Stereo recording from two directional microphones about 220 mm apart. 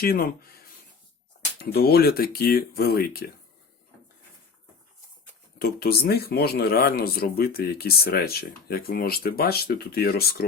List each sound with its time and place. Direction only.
0.0 s speech: 45° left (ahead or behind)
1.5 s speech: 45° left (ahead or behind)
5.5 s speech: 45° left (ahead or behind)